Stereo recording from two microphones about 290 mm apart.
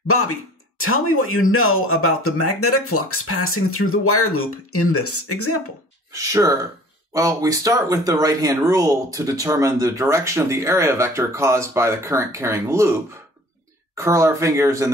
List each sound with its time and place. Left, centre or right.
0.1 s speech: left
6.1 s speech: centre
13.9 s speech: centre